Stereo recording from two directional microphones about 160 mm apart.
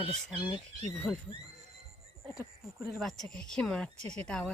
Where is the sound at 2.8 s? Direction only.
Centre (ahead or behind).